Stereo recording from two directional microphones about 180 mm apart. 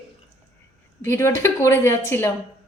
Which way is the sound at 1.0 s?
15° left (ahead or behind).